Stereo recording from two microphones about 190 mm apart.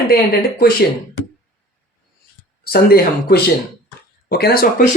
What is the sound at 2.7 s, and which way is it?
Speech, 55° left (ahead or behind).